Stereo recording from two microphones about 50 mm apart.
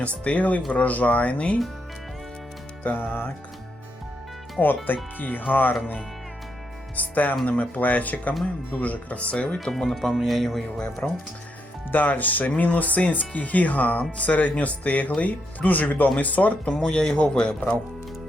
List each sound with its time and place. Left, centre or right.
0.0 s speech: left
2.8 s speech: left
4.6 s speech: left
6.9 s speech: left
9.7 s speech: centre
10.8 s a man's voice: centre
11.9 s speech: left
16.7 s a man's voice: centre